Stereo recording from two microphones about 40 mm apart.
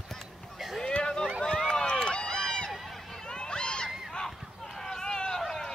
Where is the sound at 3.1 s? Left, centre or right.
Centre.